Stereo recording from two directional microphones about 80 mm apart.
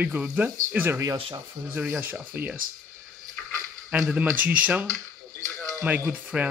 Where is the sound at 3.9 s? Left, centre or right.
Right.